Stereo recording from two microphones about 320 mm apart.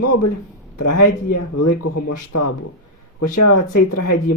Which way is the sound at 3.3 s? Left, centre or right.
Left.